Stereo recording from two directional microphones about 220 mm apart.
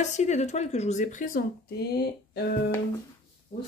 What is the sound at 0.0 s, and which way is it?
Speech, 30° left (ahead or behind).